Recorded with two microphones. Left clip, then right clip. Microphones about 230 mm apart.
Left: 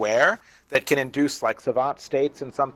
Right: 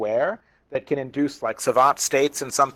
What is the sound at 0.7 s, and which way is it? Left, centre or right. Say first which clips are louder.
Speech: left 4 dB; left.